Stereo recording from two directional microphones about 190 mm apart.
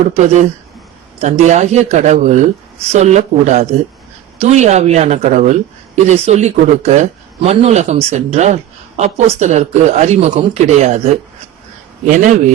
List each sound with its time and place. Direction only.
0.1 s a man's voice: 35° right (ahead or behind)